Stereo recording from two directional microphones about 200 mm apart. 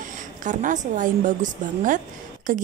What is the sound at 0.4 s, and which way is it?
A woman's voice, 40° right (ahead or behind).